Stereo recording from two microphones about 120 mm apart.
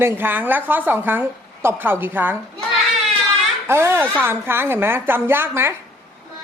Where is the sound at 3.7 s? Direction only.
20° right (ahead or behind).